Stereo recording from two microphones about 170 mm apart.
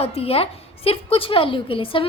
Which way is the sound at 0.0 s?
35° left (ahead or behind).